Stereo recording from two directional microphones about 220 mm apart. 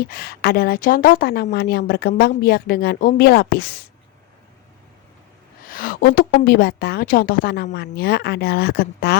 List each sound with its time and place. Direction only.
0.0 s a woman's voice: 45° left (ahead or behind)
5.6 s a woman's voice: 40° left (ahead or behind)